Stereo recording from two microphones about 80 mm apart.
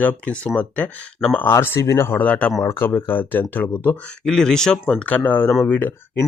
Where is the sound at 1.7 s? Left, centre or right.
Left.